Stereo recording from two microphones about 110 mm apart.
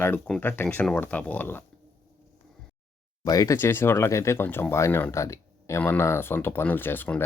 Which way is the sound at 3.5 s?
20° left (ahead or behind).